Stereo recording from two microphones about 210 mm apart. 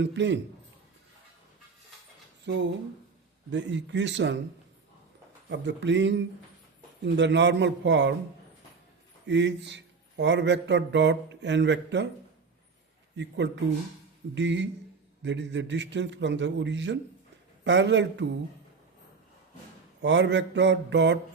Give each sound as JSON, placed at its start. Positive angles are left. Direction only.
{"t": 0.0, "sound": "speech", "side_deg": -55}
{"t": 2.5, "sound": "speech", "side_deg": -55}
{"t": 5.5, "sound": "speech", "side_deg": -55}
{"t": 9.2, "sound": "speech", "side_deg": -55}
{"t": 13.1, "sound": "speech", "side_deg": -55}
{"t": 20.0, "sound": "speech", "side_deg": -60}